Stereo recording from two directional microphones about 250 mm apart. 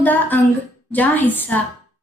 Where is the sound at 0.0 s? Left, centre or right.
Centre.